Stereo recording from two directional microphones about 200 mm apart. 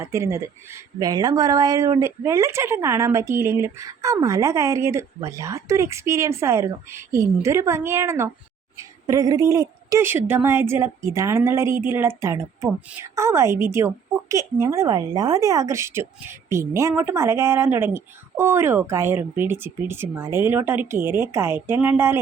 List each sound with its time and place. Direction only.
0.0 s a woman's voice: 15° right (ahead or behind)